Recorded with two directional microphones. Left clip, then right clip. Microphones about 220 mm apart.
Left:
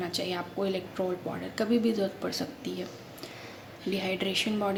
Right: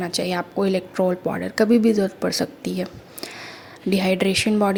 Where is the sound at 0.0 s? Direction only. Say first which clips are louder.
Right 8 dB; 30° right (ahead or behind).